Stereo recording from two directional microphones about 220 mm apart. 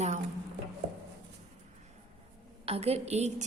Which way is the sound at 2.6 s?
25° right (ahead or behind).